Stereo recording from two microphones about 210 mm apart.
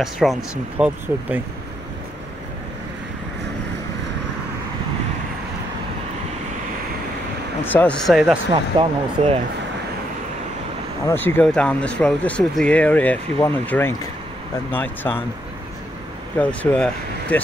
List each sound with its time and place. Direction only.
0.0 s speech: centre (ahead or behind)
7.6 s speech: 10° left (ahead or behind)
8.7 s speech: 25° right (ahead or behind)
11.1 s speech: 10° left (ahead or behind)
16.3 s speech: 5° left (ahead or behind)